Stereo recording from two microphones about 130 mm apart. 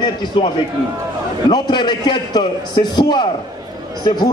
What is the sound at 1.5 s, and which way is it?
A man's voice, 35° left (ahead or behind).